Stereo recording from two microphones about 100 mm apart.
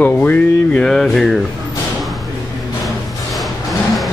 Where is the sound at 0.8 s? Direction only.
5° left (ahead or behind).